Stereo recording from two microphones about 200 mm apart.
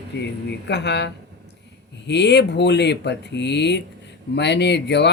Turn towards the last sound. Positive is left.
turn(degrees=60)  # may be behind; listen again after turning